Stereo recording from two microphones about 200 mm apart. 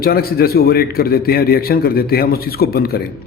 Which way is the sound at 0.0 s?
50° left (ahead or behind).